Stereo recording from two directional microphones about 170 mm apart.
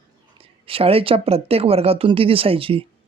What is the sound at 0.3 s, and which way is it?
Speech, 35° right (ahead or behind).